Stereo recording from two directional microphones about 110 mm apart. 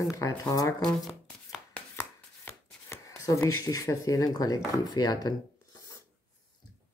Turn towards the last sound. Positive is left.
turn(degrees=35)  # may be behind; listen again after turning